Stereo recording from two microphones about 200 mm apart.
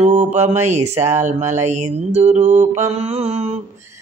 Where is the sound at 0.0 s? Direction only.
35° right (ahead or behind).